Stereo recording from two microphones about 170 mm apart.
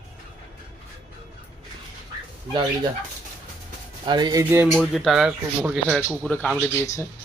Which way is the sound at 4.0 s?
25° right (ahead or behind).